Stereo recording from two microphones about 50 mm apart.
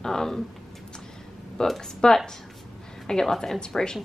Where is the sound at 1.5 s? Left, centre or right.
Centre.